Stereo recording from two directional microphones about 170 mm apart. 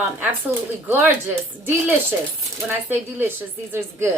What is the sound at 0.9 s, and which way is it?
Speech, 10° right (ahead or behind).